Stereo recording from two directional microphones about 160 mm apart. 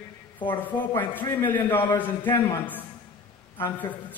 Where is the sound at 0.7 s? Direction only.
10° left (ahead or behind).